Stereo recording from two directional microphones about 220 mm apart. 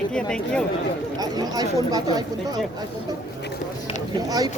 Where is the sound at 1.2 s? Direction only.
15° right (ahead or behind).